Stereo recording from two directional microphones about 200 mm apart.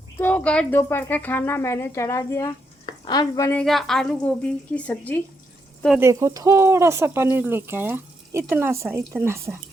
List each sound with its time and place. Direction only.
0.2 s a woman's voice: 10° left (ahead or behind)
3.6 s a woman's voice: centre (ahead or behind)
6.0 s speech: 15° right (ahead or behind)